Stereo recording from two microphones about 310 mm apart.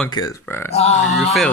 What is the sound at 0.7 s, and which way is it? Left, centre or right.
Speech, left.